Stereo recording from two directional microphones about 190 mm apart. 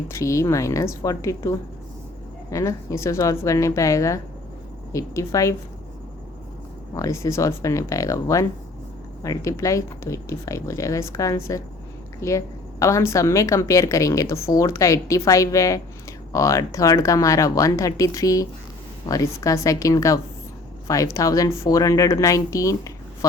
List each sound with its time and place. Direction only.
0.1 s a woman's voice: 15° left (ahead or behind)
6.9 s a woman's voice: 15° left (ahead or behind)